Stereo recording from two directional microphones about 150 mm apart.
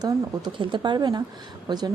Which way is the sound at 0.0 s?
30° right (ahead or behind).